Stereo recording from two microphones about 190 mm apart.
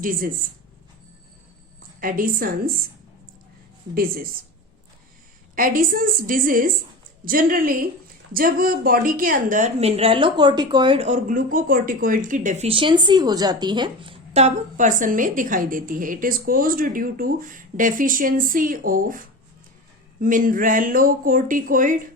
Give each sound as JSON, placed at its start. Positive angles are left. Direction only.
{"t": 0.0, "sound": "a woman's voice", "side_deg": -50}
{"t": 2.0, "sound": "a woman's voice", "side_deg": -50}
{"t": 3.9, "sound": "a woman's voice", "side_deg": -50}
{"t": 5.5, "sound": "a woman's voice", "side_deg": -45}